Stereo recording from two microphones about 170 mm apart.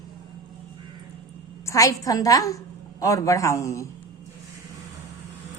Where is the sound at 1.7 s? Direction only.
20° left (ahead or behind).